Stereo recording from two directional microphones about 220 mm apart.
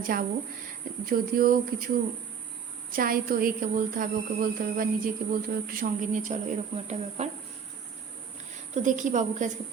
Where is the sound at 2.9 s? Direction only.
40° right (ahead or behind).